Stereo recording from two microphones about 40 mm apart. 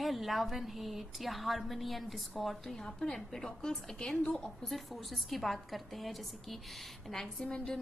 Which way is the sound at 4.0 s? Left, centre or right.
Left.